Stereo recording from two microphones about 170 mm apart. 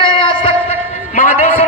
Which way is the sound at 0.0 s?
30° left (ahead or behind).